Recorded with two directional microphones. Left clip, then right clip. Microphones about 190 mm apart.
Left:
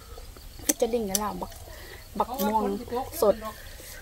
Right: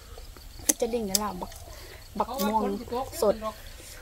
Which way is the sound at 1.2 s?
20° left (ahead or behind).